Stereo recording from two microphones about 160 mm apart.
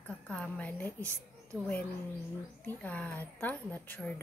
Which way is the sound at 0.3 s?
10° left (ahead or behind).